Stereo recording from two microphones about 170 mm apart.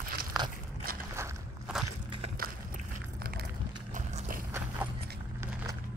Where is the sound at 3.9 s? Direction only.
45° right (ahead or behind).